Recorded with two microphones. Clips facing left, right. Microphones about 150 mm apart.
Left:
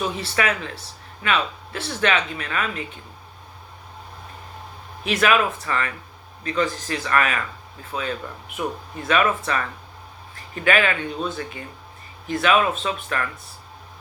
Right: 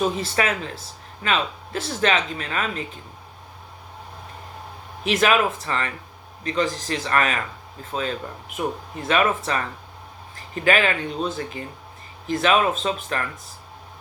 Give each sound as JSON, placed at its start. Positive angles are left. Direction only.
{"t": 0.0, "sound": "speech", "side_deg": -40}
{"t": 5.0, "sound": "speech", "side_deg": -35}